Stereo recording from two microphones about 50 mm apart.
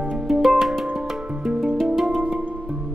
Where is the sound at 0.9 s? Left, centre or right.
Centre.